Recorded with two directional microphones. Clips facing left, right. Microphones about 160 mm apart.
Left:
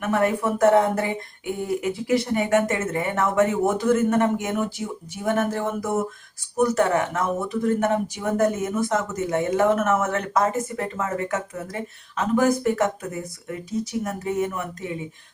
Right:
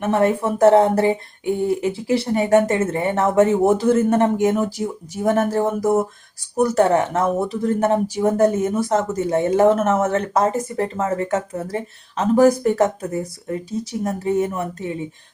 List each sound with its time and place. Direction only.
0.0 s speech: 30° right (ahead or behind)